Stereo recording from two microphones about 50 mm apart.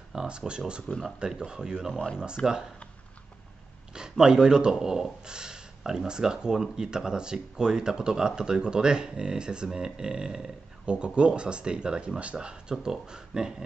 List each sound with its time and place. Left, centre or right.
0.1 s speech: centre
3.9 s speech: centre